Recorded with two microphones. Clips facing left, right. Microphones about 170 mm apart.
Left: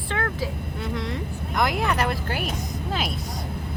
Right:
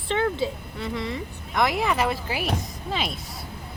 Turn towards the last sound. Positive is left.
turn(degrees=0)  # may be behind; listen again after turning